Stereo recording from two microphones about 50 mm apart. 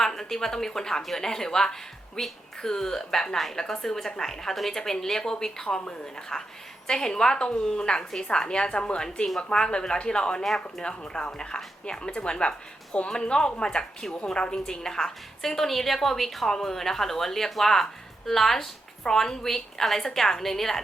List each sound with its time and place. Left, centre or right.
0.0 s a woman's voice: centre